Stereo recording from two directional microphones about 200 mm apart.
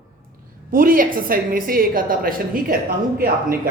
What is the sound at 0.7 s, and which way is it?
Speech, 45° right (ahead or behind).